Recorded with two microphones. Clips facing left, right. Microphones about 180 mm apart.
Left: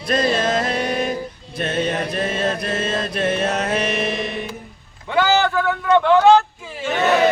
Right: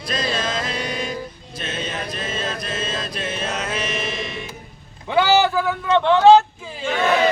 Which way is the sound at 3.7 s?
60° left (ahead or behind).